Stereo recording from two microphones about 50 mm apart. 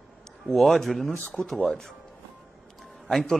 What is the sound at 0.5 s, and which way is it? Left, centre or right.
Speech, centre.